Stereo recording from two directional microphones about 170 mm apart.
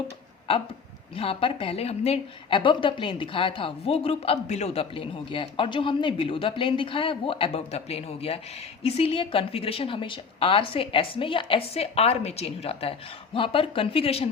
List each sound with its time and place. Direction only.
1.1 s speech: 35° left (ahead or behind)